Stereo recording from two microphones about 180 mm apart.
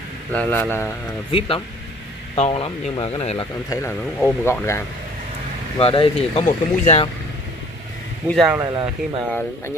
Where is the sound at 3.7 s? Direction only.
15° left (ahead or behind).